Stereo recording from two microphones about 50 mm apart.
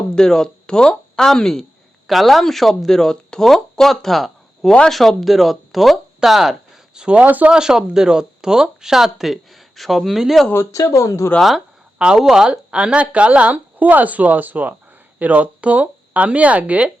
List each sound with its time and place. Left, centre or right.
0.1 s speech: centre
6.1 s a sound: centre
7.0 s speech: right
7.3 s speech: right
7.5 s speech: centre
10.5 s speech: left
11.9 s speech: centre